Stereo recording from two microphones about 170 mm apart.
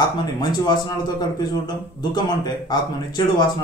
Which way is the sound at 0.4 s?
25° left (ahead or behind).